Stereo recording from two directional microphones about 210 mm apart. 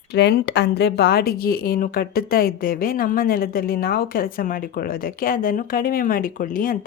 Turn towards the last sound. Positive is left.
turn(degrees=40)  # may be behind; listen again after turning